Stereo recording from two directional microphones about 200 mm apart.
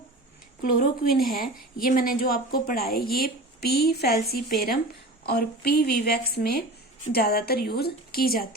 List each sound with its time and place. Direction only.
0.6 s a woman's voice: 45° left (ahead or behind)